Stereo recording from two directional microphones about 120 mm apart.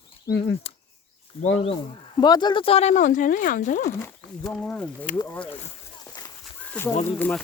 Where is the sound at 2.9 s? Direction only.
90° left.